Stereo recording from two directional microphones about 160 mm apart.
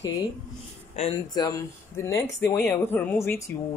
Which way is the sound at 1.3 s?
20° left (ahead or behind).